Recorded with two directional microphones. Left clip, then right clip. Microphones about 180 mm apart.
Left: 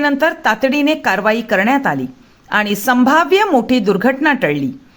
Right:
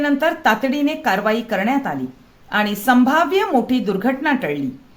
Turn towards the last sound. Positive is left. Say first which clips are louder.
# left 6 dB
turn(degrees=40)  # may be behind; listen again after turning